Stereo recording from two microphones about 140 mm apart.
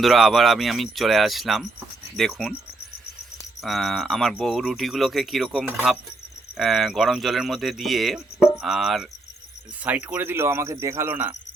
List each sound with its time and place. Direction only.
0.0 s speech: centre (ahead or behind)
3.6 s speech: centre (ahead or behind)